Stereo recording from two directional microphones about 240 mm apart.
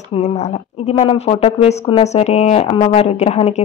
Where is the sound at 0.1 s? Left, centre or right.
Left.